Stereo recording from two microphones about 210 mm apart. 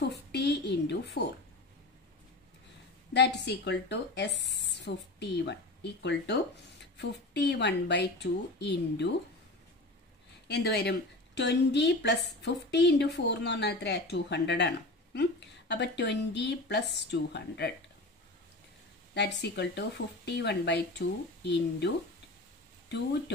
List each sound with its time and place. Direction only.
0.1 s a woman's voice: 50° left (ahead or behind)
3.1 s a woman's voice: 55° left (ahead or behind)
10.5 s a woman's voice: 50° left (ahead or behind)
15.7 s a woman's voice: 55° left (ahead or behind)
19.1 s a woman's voice: 55° left (ahead or behind)